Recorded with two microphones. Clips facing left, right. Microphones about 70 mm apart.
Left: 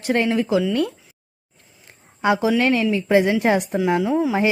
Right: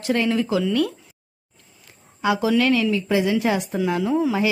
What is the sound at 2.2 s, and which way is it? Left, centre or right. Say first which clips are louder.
A woman's voice: left 1 dB; left.